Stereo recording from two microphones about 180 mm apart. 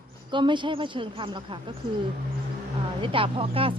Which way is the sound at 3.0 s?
30° right (ahead or behind).